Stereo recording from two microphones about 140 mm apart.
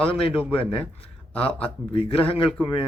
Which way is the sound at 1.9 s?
40° left (ahead or behind).